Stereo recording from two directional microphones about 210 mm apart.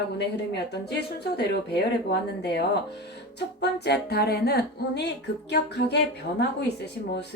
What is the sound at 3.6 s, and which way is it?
Speech, 55° left (ahead or behind).